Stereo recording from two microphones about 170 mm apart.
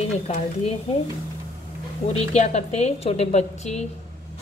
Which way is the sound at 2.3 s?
40° left (ahead or behind).